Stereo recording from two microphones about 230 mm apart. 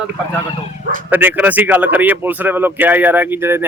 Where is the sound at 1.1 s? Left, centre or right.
Centre.